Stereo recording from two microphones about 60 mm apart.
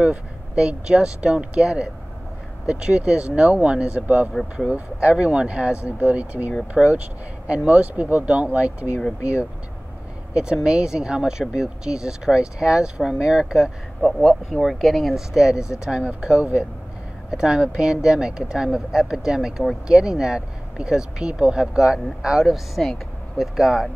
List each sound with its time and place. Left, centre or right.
0.0 s speech: centre
10.3 s speech: centre